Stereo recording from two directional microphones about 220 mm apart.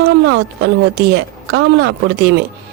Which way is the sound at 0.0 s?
50° right (ahead or behind).